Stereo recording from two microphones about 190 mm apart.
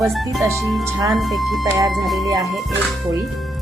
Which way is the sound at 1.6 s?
20° right (ahead or behind).